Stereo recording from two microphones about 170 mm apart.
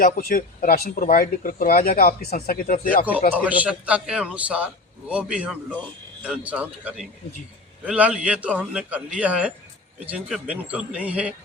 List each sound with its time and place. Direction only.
0.0 s speech: 55° left (ahead or behind)
3.3 s a man's voice: 10° right (ahead or behind)